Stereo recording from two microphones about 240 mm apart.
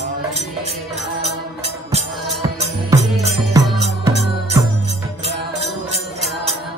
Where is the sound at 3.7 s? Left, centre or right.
Right.